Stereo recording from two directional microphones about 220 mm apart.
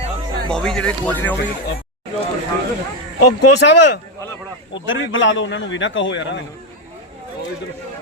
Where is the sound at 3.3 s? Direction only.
50° left (ahead or behind).